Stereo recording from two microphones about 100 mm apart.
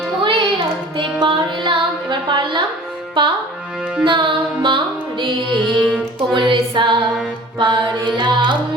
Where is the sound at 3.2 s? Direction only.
55° right (ahead or behind).